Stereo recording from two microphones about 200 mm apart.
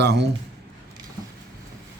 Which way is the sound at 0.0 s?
55° right (ahead or behind).